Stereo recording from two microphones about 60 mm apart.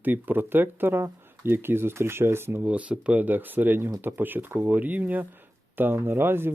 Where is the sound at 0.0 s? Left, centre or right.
Right.